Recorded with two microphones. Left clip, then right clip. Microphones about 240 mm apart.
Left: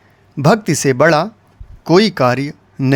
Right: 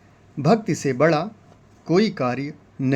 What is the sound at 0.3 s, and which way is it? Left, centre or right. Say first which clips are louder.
Speech: left 6 dB; left.